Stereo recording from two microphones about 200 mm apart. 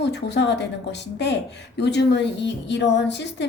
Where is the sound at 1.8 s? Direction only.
60° left (ahead or behind).